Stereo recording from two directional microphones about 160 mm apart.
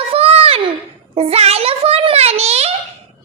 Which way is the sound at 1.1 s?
40° right (ahead or behind).